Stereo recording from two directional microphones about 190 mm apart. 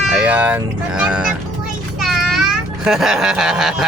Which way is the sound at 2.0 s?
Centre (ahead or behind).